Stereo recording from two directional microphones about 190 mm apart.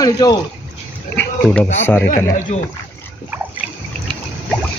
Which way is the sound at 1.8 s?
10° left (ahead or behind).